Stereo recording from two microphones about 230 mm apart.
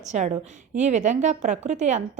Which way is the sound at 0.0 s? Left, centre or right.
Right.